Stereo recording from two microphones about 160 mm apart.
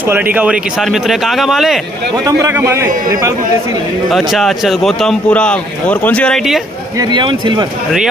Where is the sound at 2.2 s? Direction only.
15° right (ahead or behind).